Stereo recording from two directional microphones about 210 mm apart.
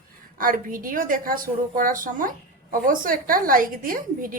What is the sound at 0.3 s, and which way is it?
A woman's voice, 40° right (ahead or behind).